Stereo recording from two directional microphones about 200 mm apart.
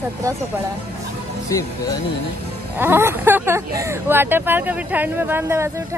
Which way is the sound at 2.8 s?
10° right (ahead or behind).